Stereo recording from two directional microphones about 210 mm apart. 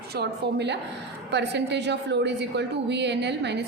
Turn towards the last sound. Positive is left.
turn(degrees=-55)  # may be behind; listen again after turning